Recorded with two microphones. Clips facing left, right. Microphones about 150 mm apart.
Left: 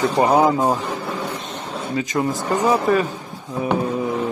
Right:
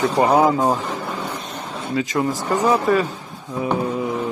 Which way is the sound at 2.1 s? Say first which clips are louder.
Left 1 dB; 25° left (ahead or behind).